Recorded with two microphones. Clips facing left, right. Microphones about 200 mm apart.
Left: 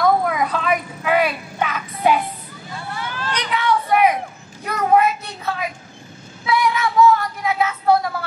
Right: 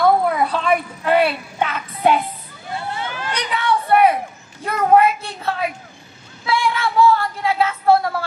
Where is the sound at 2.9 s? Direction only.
20° right (ahead or behind).